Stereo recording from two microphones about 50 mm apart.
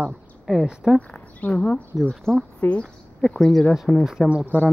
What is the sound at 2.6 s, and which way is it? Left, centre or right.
Speech, left.